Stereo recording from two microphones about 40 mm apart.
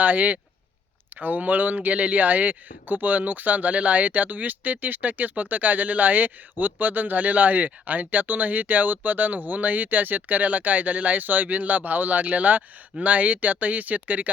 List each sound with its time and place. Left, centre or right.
0.0 s speech: right